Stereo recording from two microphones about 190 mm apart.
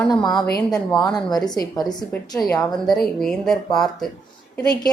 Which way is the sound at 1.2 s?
20° left (ahead or behind).